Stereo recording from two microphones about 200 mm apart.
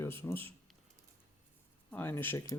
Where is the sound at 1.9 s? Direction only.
10° left (ahead or behind).